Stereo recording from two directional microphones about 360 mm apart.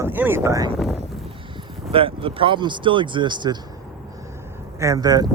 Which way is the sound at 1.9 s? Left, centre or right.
Centre.